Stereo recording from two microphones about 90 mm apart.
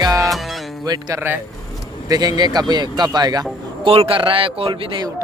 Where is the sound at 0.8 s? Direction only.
45° right (ahead or behind).